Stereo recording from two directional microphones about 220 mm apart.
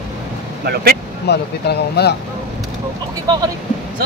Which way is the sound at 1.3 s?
50° left (ahead or behind).